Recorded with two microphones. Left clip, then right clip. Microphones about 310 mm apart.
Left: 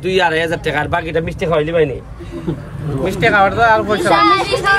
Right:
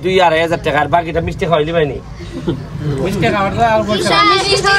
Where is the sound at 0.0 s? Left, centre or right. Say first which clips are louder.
Right 3 dB; centre.